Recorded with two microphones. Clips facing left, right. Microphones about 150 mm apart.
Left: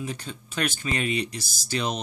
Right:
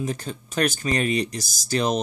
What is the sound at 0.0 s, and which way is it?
Speech, 45° right (ahead or behind).